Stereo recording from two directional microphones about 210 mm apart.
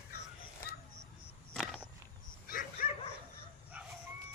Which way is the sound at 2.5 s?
40° left (ahead or behind).